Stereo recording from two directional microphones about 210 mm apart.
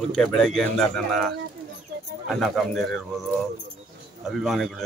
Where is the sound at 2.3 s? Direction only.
Centre (ahead or behind).